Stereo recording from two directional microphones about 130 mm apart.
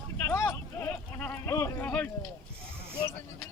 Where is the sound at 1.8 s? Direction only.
10° left (ahead or behind).